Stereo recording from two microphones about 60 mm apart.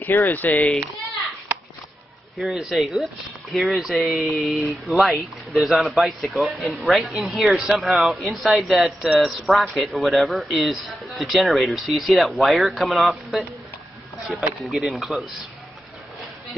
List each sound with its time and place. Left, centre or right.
0.0 s speech: left
2.3 s speech: centre
14.6 s speech: centre